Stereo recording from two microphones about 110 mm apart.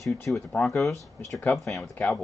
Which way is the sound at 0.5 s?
25° left (ahead or behind).